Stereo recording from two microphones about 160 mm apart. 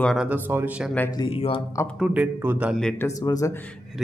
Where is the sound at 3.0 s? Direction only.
20° left (ahead or behind).